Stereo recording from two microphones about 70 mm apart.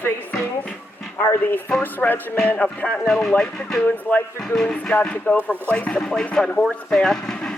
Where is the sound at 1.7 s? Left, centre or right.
Left.